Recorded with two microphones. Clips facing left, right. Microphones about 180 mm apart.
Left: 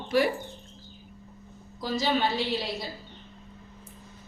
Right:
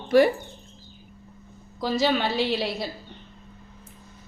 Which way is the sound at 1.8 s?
70° right (ahead or behind).